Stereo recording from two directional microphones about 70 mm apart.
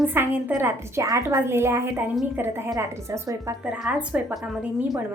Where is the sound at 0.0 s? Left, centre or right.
Right.